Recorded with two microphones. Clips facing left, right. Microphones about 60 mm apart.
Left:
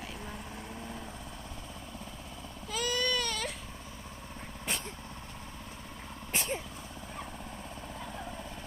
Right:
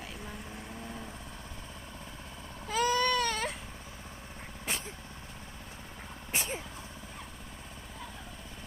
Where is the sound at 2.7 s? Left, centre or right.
Right.